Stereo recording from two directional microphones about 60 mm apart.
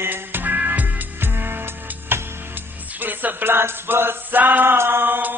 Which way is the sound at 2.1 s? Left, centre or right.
Right.